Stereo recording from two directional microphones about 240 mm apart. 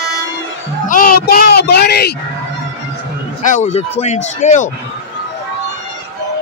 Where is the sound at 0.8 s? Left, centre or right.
Left.